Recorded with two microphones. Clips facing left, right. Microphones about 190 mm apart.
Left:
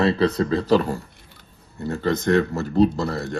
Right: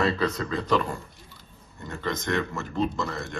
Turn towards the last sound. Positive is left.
turn(degrees=35)  # may be behind; listen again after turning